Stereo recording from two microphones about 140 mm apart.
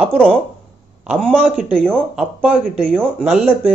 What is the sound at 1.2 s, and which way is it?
A man's voice, 5° left (ahead or behind).